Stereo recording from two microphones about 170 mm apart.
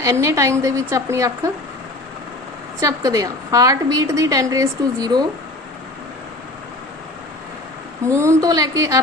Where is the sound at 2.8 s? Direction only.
20° right (ahead or behind).